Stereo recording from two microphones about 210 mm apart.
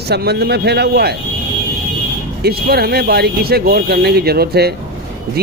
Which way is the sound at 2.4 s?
50° right (ahead or behind).